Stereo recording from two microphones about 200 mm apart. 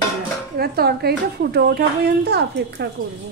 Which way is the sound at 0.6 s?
50° right (ahead or behind).